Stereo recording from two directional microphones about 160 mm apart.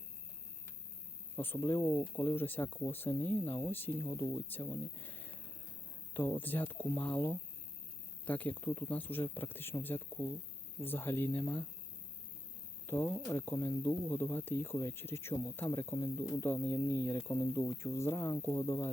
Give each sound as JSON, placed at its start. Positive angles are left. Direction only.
{"t": 1.4, "sound": "speech", "side_deg": 15}
{"t": 12.9, "sound": "speech", "side_deg": 15}